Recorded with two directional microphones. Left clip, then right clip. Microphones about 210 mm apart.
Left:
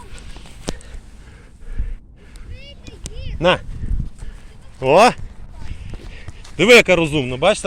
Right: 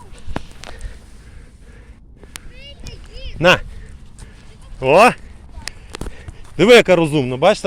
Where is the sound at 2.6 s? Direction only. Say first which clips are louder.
Even; 55° right (ahead or behind).